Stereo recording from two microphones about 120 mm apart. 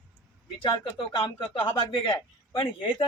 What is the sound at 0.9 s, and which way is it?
Speech, 45° left (ahead or behind).